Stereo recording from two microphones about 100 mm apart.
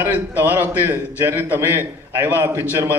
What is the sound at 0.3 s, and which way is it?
A man's voice, 20° right (ahead or behind).